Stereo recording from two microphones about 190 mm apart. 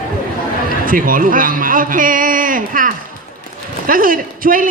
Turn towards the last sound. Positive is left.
turn(degrees=-45)  # may be behind; listen again after turning